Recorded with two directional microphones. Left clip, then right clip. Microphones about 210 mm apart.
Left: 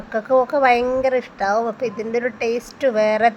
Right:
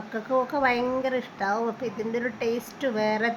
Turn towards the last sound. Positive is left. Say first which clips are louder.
# left 9 dB
turn(degrees=20)  # may be behind; listen again after turning